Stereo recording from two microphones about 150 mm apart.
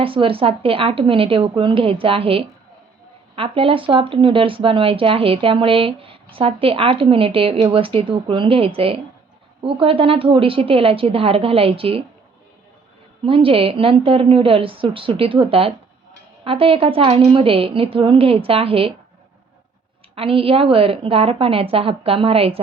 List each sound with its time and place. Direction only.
0.0 s speech: 35° right (ahead or behind)
13.2 s speech: 35° right (ahead or behind)
20.1 s speech: 40° right (ahead or behind)